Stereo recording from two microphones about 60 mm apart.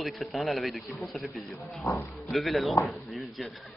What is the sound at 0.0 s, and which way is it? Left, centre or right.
A man's voice, centre.